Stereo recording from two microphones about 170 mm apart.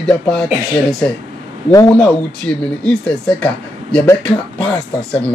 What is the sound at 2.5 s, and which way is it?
Speech, 5° left (ahead or behind).